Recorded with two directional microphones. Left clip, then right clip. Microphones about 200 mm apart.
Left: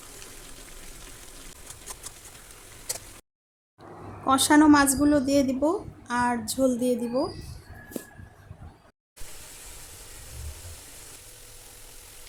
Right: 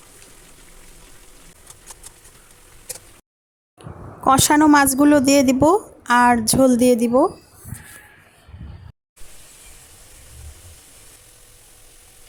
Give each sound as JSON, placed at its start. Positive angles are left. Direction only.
{"t": 3.8, "sound": "speech", "side_deg": -45}